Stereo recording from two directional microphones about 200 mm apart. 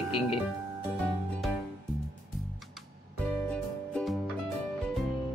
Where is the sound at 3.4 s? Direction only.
5° left (ahead or behind).